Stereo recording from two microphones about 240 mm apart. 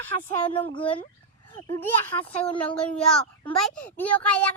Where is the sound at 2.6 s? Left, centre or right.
Centre.